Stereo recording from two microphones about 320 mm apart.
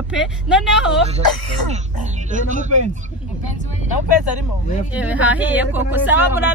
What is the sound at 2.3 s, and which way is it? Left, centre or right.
Speech, right.